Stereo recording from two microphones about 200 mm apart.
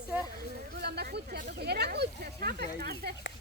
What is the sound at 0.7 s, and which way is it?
Speech, 55° right (ahead or behind).